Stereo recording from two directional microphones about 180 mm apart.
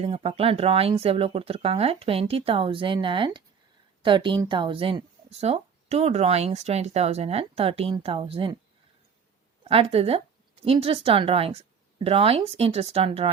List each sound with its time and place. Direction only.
0.0 s a woman's voice: 35° right (ahead or behind)
9.6 s a woman's voice: 30° right (ahead or behind)